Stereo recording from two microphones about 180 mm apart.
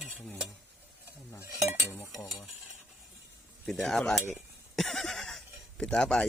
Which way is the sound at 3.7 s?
Centre (ahead or behind).